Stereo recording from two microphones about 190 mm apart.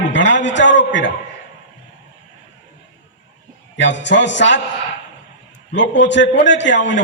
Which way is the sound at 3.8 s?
70° left (ahead or behind).